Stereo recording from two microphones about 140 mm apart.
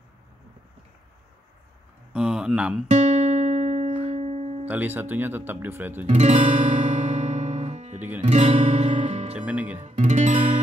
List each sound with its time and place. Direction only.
2.1 s speech: 5° right (ahead or behind)
2.9 s music: 55° right (ahead or behind)
4.6 s speech: 15° right (ahead or behind)
6.0 s music: 50° right (ahead or behind)
8.2 s speech: 55° right (ahead or behind)
9.3 s speech: 10° right (ahead or behind)
9.8 s speech: 55° right (ahead or behind)